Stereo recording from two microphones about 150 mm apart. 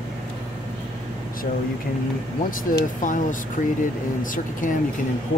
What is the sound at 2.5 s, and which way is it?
Speech, 65° left (ahead or behind).